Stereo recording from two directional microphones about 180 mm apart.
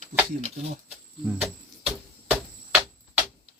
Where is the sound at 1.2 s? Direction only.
Centre (ahead or behind).